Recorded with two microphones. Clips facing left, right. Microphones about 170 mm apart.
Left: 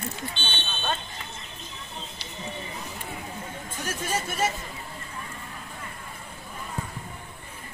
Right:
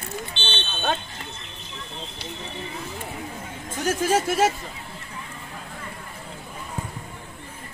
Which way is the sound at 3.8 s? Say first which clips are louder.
Right 9 dB; 90° right.